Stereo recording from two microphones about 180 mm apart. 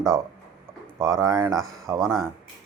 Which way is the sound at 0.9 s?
20° right (ahead or behind).